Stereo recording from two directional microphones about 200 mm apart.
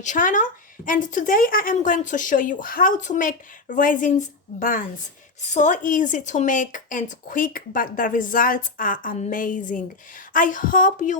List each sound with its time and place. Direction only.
0.0 s speech: 40° left (ahead or behind)